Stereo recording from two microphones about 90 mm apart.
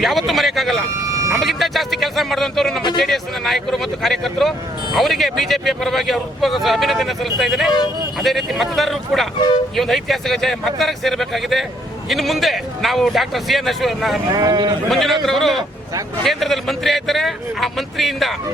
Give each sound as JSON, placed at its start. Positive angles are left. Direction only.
{"t": 0.0, "sound": "speech", "side_deg": 0}
{"t": 14.3, "sound": "speech", "side_deg": -45}
{"t": 14.8, "sound": "speech", "side_deg": 0}